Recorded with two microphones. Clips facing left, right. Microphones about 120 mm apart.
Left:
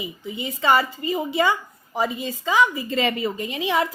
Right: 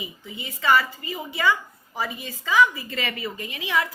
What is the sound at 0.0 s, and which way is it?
A woman's voice, 20° left (ahead or behind).